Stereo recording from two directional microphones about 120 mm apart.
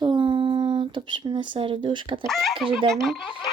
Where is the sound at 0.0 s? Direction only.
40° right (ahead or behind).